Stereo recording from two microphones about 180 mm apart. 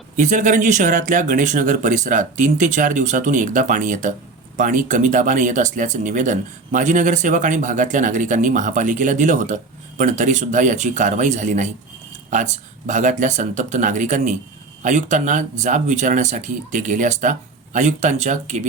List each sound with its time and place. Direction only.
0.2 s speech: 45° right (ahead or behind)